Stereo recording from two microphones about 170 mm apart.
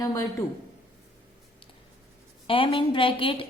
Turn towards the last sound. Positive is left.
turn(degrees=30)  # may be behind; listen again after turning